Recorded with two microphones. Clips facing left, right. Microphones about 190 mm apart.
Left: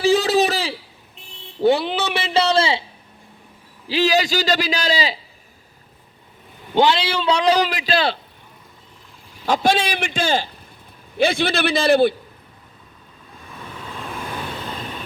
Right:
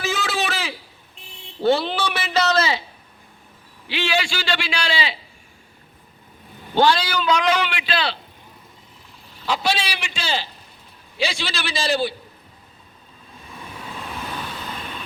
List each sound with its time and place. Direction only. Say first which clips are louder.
0.0 s a sound: left 9 dB; 35° left (ahead or behind)
1.6 s a man's voice: left 2 dB; 15° left (ahead or behind)
3.8 s a man's voice: left 6 dB; 35° left (ahead or behind)
6.7 s a man's voice: left 1 dB; 20° left (ahead or behind); by 8.2 s 45° left (ahead or behind)
9.5 s a man's voice: left 5 dB; 50° left (ahead or behind)